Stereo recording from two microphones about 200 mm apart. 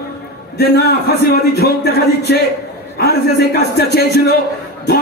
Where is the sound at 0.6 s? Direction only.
50° left (ahead or behind).